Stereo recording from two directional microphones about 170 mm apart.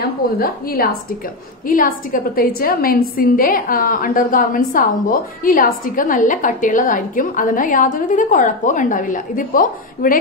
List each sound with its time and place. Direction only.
0.0 s a woman's voice: 65° left (ahead or behind)